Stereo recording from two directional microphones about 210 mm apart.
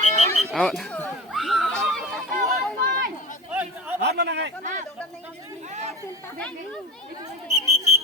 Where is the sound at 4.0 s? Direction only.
50° right (ahead or behind).